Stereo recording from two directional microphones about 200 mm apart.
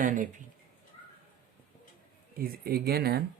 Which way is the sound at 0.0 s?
40° right (ahead or behind).